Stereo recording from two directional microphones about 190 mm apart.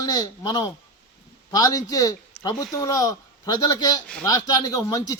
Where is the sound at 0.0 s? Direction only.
20° left (ahead or behind).